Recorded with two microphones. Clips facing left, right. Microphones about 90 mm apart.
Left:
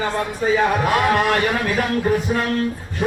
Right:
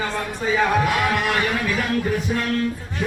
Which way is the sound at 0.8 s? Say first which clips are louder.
Left 4 dB; 40° left (ahead or behind).